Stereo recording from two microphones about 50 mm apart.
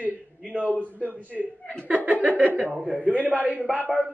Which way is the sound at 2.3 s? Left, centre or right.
Right.